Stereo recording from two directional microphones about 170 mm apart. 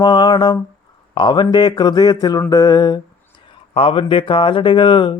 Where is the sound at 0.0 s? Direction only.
25° left (ahead or behind).